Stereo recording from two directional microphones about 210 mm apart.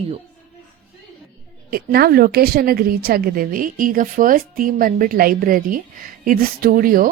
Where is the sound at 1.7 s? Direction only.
45° right (ahead or behind).